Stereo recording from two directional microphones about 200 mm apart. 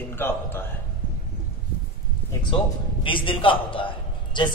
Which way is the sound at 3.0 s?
25° left (ahead or behind).